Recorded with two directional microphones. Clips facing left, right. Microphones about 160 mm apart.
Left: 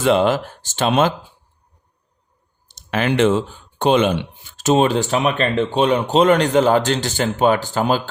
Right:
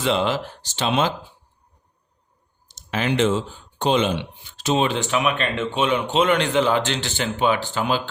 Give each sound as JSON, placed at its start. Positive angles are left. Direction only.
{"t": 0.0, "sound": "speech", "side_deg": 50}
{"t": 2.6, "sound": "speech", "side_deg": 60}